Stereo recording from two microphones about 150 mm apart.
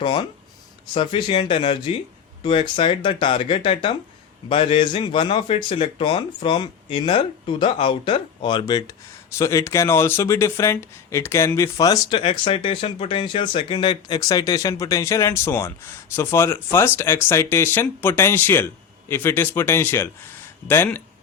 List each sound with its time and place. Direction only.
0.0 s speech: 30° left (ahead or behind); by 21.0 s 15° left (ahead or behind)